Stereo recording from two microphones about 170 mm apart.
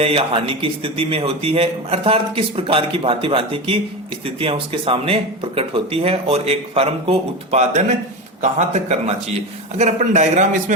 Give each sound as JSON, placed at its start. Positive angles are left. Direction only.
{"t": 0.0, "sound": "speech", "side_deg": -35}